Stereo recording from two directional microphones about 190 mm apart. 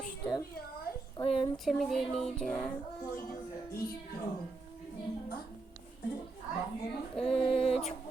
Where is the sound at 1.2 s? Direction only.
30° left (ahead or behind).